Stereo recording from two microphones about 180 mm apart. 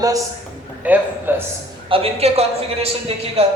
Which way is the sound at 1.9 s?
35° right (ahead or behind).